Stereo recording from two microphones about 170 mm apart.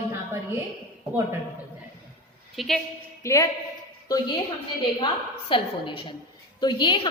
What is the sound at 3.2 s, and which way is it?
Speech, 20° left (ahead or behind).